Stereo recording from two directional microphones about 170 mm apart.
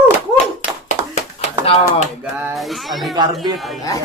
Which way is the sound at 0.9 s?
40° left (ahead or behind).